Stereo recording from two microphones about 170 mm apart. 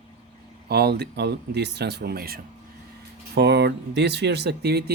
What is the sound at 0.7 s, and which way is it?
Speech, 70° right (ahead or behind).